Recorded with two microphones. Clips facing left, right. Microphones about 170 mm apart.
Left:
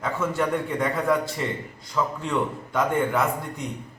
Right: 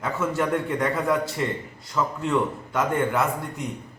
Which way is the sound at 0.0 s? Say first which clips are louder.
Even; centre (ahead or behind).